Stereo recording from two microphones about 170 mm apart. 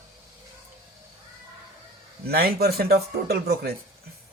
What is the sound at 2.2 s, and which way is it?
Speech, 65° right (ahead or behind).